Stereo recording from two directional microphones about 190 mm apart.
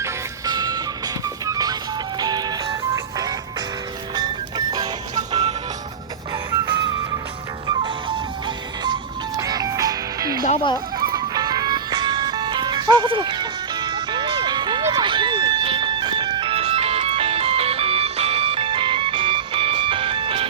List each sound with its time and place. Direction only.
0.0 s music: 20° right (ahead or behind)